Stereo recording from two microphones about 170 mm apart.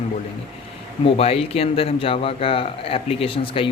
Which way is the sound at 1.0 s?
35° left (ahead or behind).